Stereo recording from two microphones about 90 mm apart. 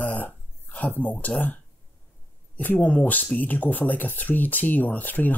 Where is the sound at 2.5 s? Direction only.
20° left (ahead or behind).